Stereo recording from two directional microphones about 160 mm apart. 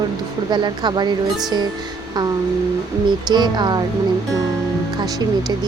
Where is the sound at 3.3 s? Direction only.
25° right (ahead or behind).